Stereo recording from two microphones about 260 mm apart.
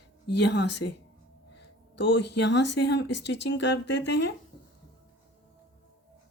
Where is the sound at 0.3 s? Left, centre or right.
Left.